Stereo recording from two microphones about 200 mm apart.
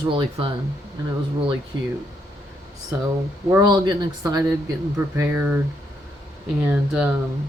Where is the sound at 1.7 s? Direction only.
20° right (ahead or behind).